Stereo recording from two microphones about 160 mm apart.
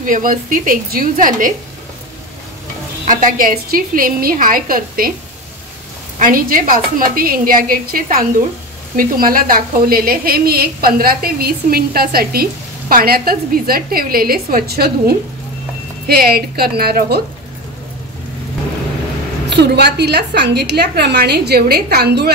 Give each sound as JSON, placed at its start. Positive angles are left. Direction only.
{"t": 0.0, "sound": "a woman's voice", "side_deg": -55}
{"t": 3.1, "sound": "a woman's voice", "side_deg": -60}
{"t": 6.1, "sound": "a woman's voice", "side_deg": -60}
{"t": 19.5, "sound": "a woman's voice", "side_deg": -90}